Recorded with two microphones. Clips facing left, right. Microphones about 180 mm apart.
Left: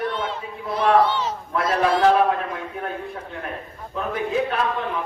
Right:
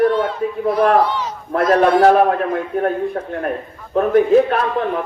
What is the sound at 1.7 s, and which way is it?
Speech, 55° right (ahead or behind).